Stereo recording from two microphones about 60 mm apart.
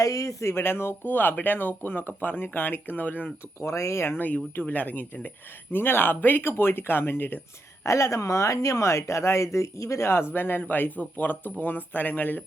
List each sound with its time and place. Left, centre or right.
0.0 s speech: left
0.4 s speech: left
3.6 s speech: left
4.0 s speech: left
4.6 s speech: left
7.9 s speech: left